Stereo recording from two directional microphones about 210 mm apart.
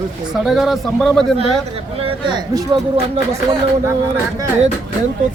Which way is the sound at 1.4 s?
25° right (ahead or behind).